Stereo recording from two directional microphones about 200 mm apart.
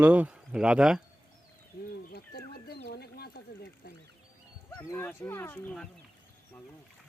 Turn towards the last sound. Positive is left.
turn(degrees=10)  # may be behind; listen again after turning